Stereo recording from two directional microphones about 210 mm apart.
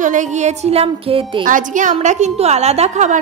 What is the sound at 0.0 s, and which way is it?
A woman's voice, 35° right (ahead or behind).